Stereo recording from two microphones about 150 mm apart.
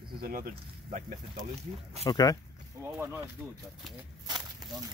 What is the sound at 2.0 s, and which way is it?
Speech, 25° left (ahead or behind).